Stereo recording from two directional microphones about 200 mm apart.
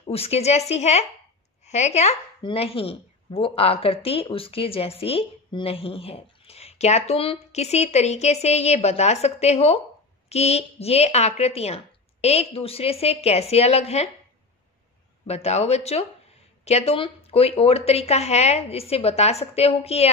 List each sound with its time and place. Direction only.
0.0 s a woman's voice: 30° left (ahead or behind)
15.2 s a woman's voice: 30° left (ahead or behind)